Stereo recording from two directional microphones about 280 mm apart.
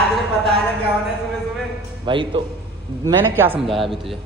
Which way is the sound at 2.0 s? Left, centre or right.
Centre.